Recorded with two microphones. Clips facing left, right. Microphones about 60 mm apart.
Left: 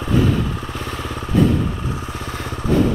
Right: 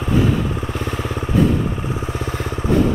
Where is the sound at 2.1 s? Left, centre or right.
Centre.